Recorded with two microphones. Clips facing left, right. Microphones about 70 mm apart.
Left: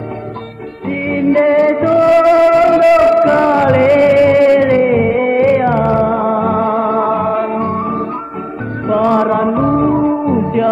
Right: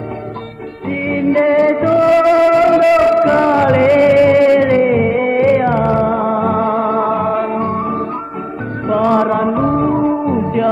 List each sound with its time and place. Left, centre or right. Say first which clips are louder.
1.3 s music: left 1 dB; centre
8.9 s music: left 1 dB; centre
9.3 s music: left 2 dB; centre